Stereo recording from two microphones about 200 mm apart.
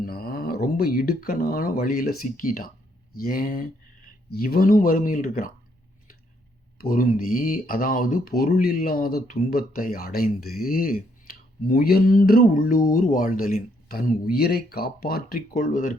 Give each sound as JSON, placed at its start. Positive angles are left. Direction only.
{"t": 0.0, "sound": "speech", "side_deg": 50}
{"t": 6.7, "sound": "speech", "side_deg": 45}